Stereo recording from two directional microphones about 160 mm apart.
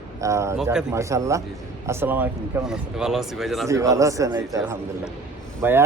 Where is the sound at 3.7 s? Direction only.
20° right (ahead or behind).